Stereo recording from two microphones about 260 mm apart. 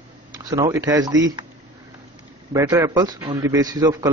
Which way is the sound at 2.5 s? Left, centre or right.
Centre.